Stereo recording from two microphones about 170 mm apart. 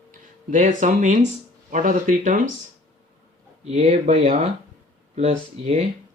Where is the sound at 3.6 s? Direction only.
40° right (ahead or behind).